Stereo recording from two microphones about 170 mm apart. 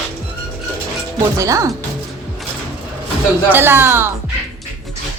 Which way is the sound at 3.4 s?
10° right (ahead or behind).